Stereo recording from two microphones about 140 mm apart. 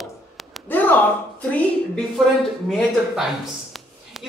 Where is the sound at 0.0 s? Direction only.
Centre (ahead or behind).